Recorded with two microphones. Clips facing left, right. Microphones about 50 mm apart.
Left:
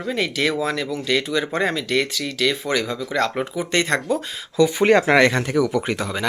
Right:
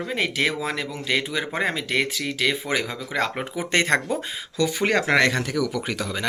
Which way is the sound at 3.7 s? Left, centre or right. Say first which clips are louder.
Right 1 dB; right.